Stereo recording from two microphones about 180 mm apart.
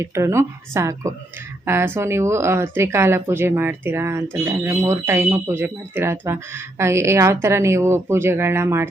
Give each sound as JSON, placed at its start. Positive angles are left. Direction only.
{"t": 0.0, "sound": "speech", "side_deg": -15}